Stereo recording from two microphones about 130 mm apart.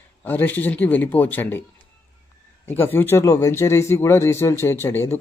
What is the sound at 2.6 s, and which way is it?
Speech, 15° left (ahead or behind).